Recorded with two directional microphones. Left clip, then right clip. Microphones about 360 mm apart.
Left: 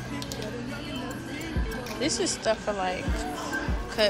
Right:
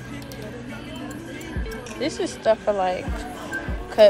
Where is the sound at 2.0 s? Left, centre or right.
Centre.